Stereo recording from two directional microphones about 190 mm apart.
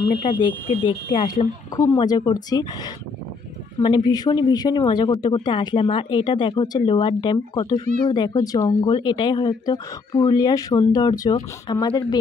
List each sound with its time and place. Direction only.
0.0 s speech: 25° left (ahead or behind)